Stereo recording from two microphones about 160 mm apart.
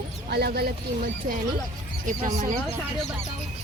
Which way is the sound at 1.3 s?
60° right (ahead or behind).